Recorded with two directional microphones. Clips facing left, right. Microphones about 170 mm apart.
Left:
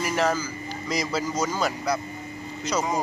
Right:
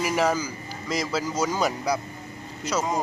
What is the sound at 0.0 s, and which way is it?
Speech, 10° right (ahead or behind).